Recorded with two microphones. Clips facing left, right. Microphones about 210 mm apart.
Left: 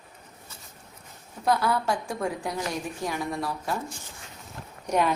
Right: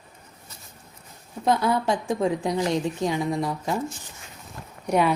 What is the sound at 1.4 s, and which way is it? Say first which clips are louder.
A woman's voice: right 3 dB; 20° right (ahead or behind).